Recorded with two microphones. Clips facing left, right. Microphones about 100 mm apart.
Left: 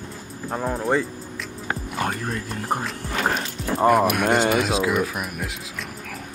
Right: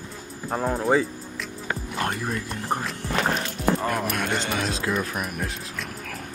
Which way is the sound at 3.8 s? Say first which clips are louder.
Left 8 dB; 15° left (ahead or behind).